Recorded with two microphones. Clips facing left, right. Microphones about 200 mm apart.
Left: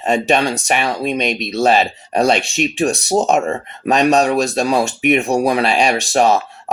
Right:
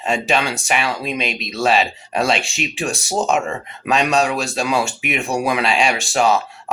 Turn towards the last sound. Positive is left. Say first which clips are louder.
# left 3 dB
turn(degrees=40)  # may be behind; listen again after turning